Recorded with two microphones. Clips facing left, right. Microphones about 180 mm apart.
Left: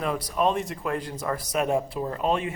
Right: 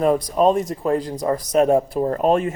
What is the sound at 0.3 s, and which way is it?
Speech, 40° right (ahead or behind).